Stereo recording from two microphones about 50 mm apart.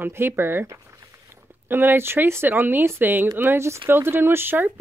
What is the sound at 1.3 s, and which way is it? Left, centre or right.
Speech, right.